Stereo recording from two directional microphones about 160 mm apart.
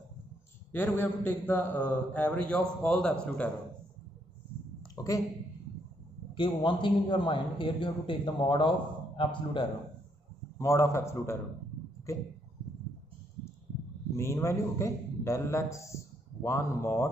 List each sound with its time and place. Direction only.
0.7 s a man's voice: 10° left (ahead or behind)
4.9 s a sound: 20° left (ahead or behind)
6.3 s a man's voice: 30° left (ahead or behind)
10.6 s a man's voice: 15° left (ahead or behind)
14.1 s a man's voice: 15° left (ahead or behind)